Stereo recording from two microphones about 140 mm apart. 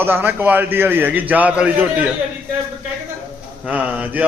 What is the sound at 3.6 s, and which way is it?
Speech, 10° right (ahead or behind).